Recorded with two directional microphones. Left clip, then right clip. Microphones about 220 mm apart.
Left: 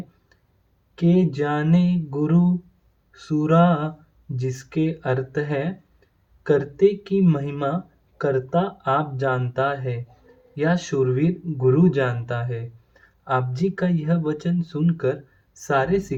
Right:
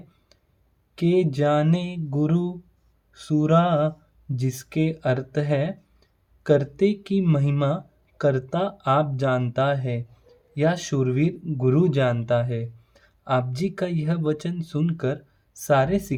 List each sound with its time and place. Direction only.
0.9 s speech: 50° right (ahead or behind)